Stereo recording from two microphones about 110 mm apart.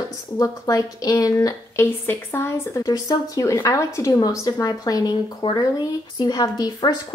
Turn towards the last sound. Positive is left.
turn(degrees=35)  # may be behind; listen again after turning